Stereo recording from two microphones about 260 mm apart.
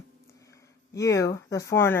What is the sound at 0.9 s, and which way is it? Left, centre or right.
A woman's voice, centre.